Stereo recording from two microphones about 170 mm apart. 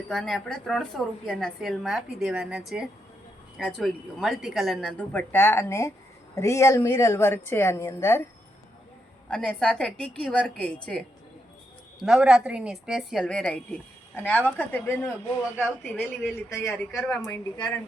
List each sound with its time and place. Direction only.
0.1 s a woman's voice: centre (ahead or behind); by 8.2 s 20° left (ahead or behind)
9.3 s a woman's voice: 5° left (ahead or behind)